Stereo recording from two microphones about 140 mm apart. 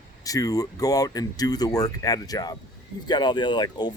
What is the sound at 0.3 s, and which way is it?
Speech, 25° left (ahead or behind).